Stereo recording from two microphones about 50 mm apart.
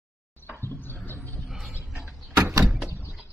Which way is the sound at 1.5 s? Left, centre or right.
Centre.